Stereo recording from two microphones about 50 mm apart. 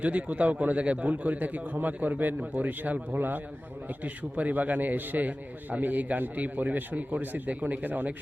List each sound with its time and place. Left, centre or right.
0.0 s a man's voice: right